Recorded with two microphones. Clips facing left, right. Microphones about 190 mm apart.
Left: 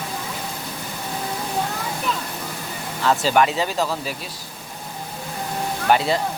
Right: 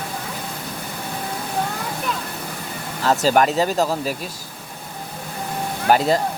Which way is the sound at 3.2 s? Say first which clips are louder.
Right 4 dB; 40° right (ahead or behind).